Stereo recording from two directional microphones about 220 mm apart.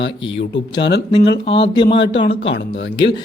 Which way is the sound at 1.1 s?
20° left (ahead or behind).